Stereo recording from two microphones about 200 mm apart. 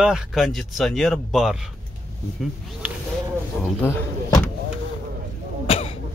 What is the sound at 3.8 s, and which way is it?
Door, 10° left (ahead or behind).